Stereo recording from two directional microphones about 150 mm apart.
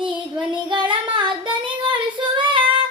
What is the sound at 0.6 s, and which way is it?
Child singing, 30° right (ahead or behind).